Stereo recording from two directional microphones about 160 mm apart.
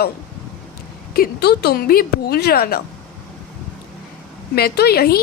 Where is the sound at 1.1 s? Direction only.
75° left (ahead or behind).